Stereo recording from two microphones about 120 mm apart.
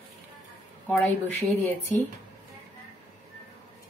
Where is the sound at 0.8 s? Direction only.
10° left (ahead or behind).